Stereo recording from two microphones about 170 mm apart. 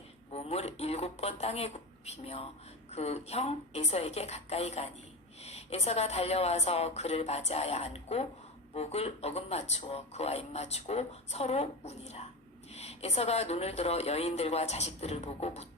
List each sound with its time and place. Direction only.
0.3 s speech: 35° left (ahead or behind)